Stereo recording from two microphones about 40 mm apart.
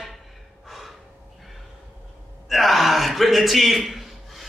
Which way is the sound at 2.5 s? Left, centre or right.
Centre.